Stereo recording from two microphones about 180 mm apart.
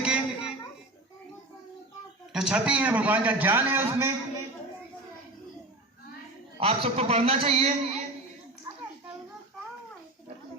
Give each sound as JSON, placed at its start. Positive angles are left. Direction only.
{"t": 0.0, "sound": "a sound", "side_deg": -5}
{"t": 2.3, "sound": "a man's voice", "side_deg": -5}
{"t": 6.6, "sound": "a man's voice", "side_deg": -30}